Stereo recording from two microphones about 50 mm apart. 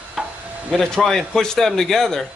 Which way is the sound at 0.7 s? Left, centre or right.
Centre.